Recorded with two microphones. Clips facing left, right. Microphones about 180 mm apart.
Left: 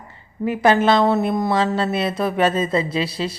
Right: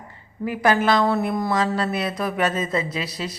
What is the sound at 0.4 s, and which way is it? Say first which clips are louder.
A woman's voice: left 4 dB; 25° left (ahead or behind).